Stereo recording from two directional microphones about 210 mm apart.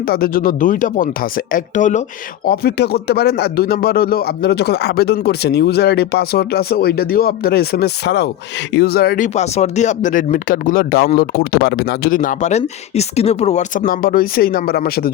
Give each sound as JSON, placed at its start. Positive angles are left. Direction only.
{"t": 0.1, "sound": "speech", "side_deg": 45}